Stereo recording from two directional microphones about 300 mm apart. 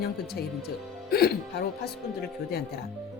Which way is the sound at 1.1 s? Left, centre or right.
Left.